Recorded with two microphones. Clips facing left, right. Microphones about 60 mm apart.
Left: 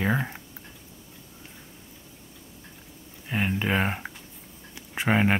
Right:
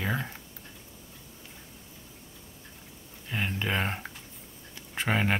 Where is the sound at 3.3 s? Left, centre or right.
Centre.